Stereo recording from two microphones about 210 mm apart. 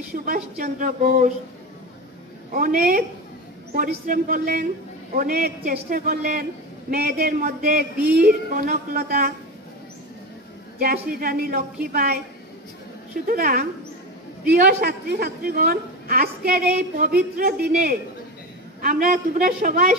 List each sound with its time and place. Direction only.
0.1 s speech: 45° right (ahead or behind)
2.5 s a man's voice: 45° right (ahead or behind)
10.8 s a man's voice: 45° right (ahead or behind)
13.3 s a man's voice: 45° right (ahead or behind)